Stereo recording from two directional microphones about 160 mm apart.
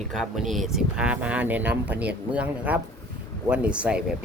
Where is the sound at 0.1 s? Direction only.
Centre (ahead or behind).